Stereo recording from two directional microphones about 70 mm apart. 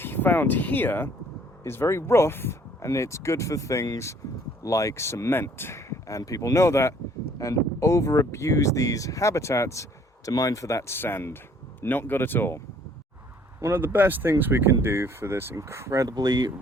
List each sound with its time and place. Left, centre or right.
0.0 s speech: left
10.2 s speech: left
10.9 s speech: left
13.6 s speech: right
16.0 s speech: right